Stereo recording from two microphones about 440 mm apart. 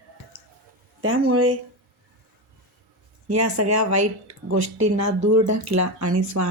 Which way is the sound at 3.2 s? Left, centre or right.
Right.